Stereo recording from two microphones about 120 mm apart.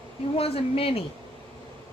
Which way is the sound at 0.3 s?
55° left (ahead or behind).